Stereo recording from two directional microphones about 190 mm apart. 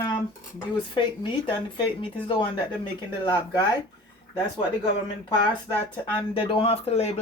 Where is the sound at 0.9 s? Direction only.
25° left (ahead or behind).